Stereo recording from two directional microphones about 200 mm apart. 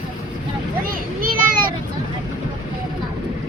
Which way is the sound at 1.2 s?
45° right (ahead or behind).